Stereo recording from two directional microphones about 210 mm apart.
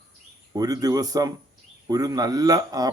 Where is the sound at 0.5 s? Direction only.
15° right (ahead or behind).